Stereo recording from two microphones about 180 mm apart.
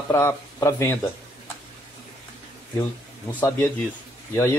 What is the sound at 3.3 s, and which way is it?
Speech, 10° left (ahead or behind).